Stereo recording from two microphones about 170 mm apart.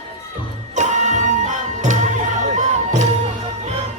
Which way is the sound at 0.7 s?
45° right (ahead or behind).